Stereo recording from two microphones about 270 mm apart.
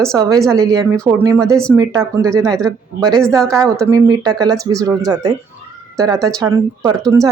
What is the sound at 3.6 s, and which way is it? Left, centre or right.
Speech, centre.